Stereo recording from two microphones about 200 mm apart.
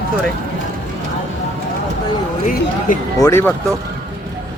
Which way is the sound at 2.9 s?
40° left (ahead or behind).